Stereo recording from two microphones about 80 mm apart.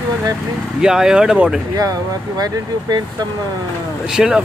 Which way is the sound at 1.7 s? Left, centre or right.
Right.